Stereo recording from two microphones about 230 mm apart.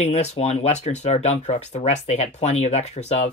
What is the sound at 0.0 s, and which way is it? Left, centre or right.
Speech, left.